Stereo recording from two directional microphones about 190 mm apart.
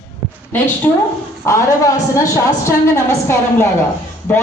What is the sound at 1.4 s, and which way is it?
A woman's voice, 15° left (ahead or behind).